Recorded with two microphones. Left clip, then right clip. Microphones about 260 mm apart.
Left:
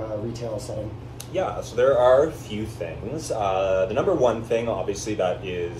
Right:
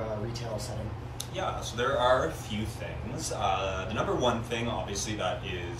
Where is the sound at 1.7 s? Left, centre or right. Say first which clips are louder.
Left 9 dB; centre.